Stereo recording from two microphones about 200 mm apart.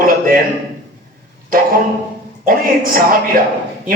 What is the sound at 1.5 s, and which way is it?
A man's voice, 45° right (ahead or behind).